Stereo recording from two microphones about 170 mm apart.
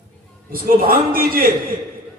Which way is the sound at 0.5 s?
60° right (ahead or behind).